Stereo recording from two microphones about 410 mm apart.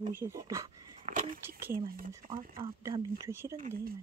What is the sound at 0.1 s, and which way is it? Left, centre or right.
Speech, centre.